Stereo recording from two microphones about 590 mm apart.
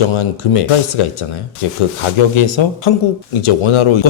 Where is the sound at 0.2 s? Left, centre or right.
Left.